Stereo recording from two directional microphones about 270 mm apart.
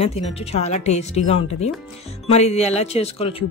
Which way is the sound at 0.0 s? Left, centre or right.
Left.